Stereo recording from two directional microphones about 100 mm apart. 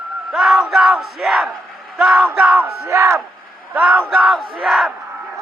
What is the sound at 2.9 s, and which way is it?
Speech, 30° right (ahead or behind).